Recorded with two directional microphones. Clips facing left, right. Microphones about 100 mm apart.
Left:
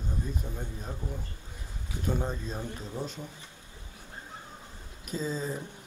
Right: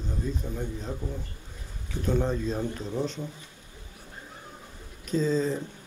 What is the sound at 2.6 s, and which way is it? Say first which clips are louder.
Speech: right 6 dB; 20° right (ahead or behind).